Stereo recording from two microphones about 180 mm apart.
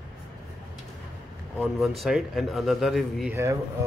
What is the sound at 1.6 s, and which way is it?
Speech, centre (ahead or behind).